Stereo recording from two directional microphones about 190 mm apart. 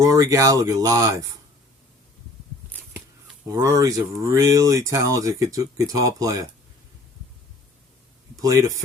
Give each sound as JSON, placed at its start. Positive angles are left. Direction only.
{"t": 0.0, "sound": "speech", "side_deg": -15}
{"t": 3.4, "sound": "speech", "side_deg": -15}
{"t": 8.4, "sound": "a man's voice", "side_deg": -20}